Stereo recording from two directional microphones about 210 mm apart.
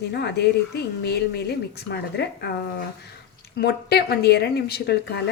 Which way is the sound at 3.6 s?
50° left (ahead or behind).